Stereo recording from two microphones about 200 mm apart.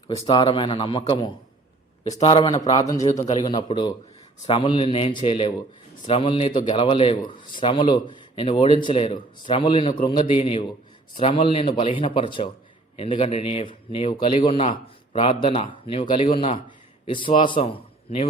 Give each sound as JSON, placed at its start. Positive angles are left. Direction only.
{"t": 0.2, "sound": "a man's voice", "side_deg": 25}